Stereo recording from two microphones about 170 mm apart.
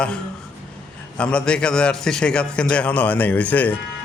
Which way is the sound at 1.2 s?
5° left (ahead or behind).